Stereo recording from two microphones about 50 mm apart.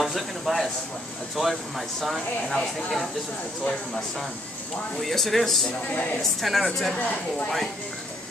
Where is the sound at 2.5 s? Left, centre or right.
Centre.